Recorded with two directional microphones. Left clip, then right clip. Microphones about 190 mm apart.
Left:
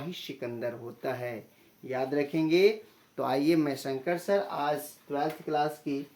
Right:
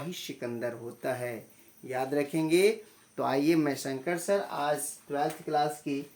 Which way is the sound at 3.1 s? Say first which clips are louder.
Even; 15° right (ahead or behind).